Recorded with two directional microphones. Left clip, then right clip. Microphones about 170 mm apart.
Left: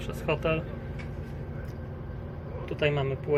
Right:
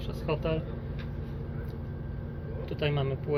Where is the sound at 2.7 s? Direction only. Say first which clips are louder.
Left 4 dB; 5° left (ahead or behind).